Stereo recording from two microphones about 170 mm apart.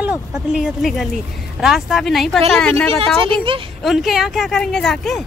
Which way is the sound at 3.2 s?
30° right (ahead or behind).